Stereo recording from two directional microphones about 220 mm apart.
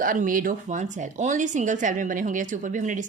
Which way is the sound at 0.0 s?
40° right (ahead or behind).